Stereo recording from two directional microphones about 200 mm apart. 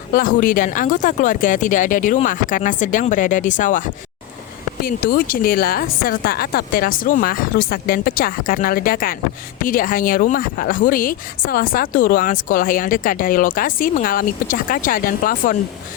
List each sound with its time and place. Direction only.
0.1 s speech: 45° left (ahead or behind)